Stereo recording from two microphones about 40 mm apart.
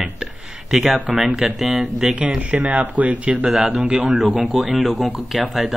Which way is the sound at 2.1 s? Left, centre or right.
Right.